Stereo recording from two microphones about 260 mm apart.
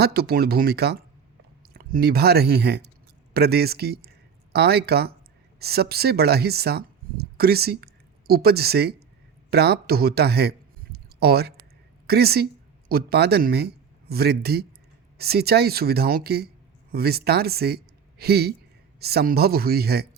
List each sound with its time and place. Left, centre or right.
0.0 s speech: right
10.9 s a sound: right
12.0 s speech: right